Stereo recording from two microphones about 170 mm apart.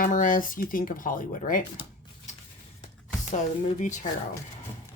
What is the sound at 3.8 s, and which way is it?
Speech, 45° left (ahead or behind).